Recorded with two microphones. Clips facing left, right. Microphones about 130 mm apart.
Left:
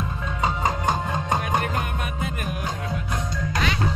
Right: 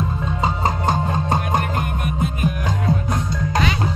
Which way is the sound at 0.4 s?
30° right (ahead or behind).